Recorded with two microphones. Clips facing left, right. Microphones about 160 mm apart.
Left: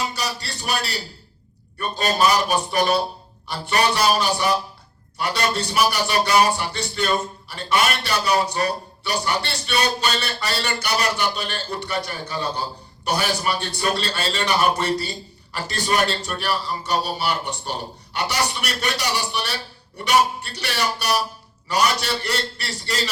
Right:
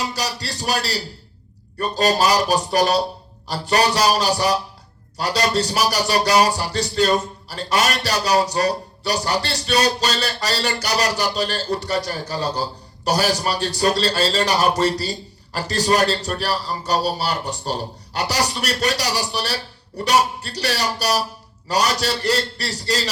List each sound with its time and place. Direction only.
0.0 s a man's voice: 40° right (ahead or behind)